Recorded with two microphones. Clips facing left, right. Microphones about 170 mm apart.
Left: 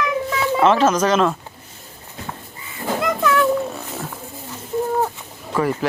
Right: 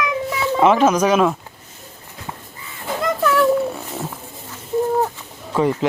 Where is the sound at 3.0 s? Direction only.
Centre (ahead or behind).